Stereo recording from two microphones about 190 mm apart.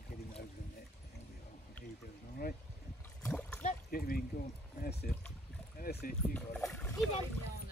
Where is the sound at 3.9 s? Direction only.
50° left (ahead or behind).